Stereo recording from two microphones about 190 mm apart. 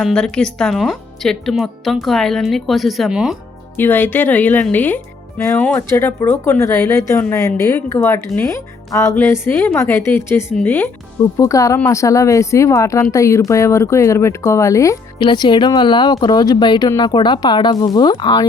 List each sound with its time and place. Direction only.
0.0 s speech: 5° left (ahead or behind)
3.8 s speech: 10° left (ahead or behind)